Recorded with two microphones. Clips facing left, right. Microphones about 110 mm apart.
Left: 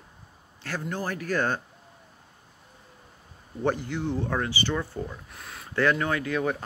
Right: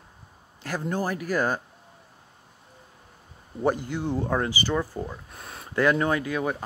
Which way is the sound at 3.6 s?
15° right (ahead or behind).